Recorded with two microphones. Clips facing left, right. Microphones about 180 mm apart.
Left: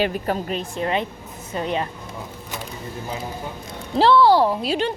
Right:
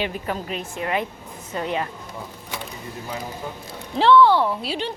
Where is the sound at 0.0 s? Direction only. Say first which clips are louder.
Left 4 dB; 40° left (ahead or behind).